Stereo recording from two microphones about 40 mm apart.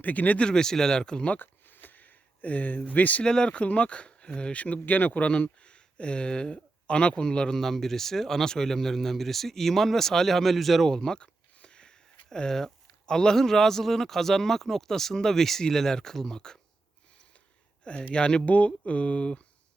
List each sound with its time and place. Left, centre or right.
0.0 s speech: left
0.3 s speech: centre
1.4 s a sound: left
3.2 s speech: left
3.5 s speech: left
4.6 s speech: left
7.6 s speech: centre
10.8 s speech: centre
18.1 s speech: left
18.4 s speech: left